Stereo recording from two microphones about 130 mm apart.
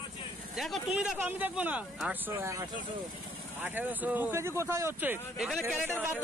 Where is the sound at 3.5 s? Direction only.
15° right (ahead or behind).